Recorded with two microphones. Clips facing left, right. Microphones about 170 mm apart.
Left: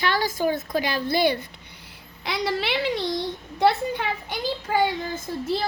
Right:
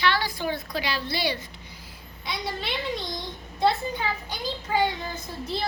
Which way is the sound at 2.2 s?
80° left.